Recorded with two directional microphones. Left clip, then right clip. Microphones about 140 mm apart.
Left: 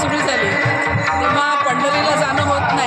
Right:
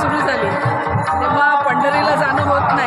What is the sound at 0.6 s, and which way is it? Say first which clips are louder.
Music: left 1 dB; 35° left (ahead or behind).